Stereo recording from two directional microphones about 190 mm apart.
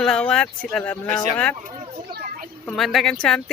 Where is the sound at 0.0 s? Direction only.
5° left (ahead or behind).